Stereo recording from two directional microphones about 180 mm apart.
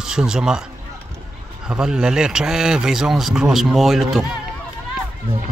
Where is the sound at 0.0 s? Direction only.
5° right (ahead or behind).